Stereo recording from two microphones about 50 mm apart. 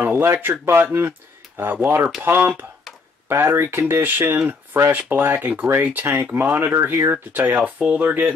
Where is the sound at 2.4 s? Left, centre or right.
Right.